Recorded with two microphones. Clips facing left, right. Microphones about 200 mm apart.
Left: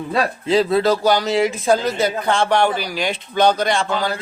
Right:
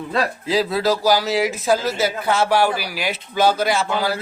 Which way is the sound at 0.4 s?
Centre (ahead or behind).